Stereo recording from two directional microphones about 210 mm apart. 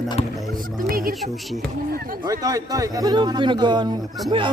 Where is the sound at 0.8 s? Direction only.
45° right (ahead or behind).